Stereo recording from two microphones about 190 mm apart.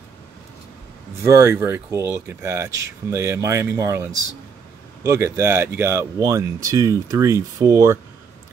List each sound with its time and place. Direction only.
1.2 s speech: 10° right (ahead or behind)